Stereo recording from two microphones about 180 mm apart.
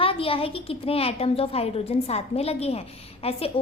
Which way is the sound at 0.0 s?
30° left (ahead or behind).